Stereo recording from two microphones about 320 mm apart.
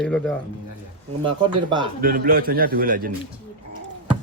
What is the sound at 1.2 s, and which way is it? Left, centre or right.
Speech, centre.